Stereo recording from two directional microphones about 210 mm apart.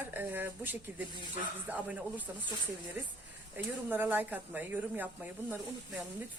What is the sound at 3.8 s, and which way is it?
Speech, 10° right (ahead or behind).